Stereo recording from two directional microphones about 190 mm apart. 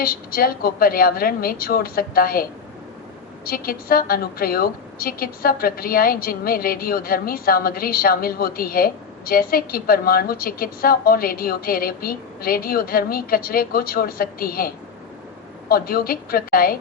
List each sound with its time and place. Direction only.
0.0 s a woman's voice: 50° left (ahead or behind)
15.7 s a woman's voice: 50° left (ahead or behind)